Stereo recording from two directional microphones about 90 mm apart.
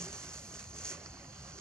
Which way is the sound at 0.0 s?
30° right (ahead or behind).